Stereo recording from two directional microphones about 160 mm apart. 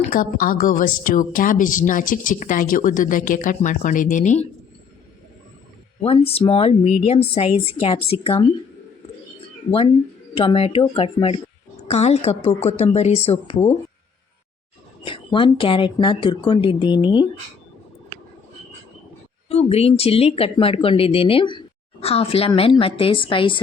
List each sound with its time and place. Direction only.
0.1 s a woman's voice: 60° left (ahead or behind)
6.0 s speech: 40° left (ahead or behind)
10.3 s speech: 35° left (ahead or behind)
15.0 s speech: 35° left (ahead or behind)
19.5 s speech: 40° left (ahead or behind)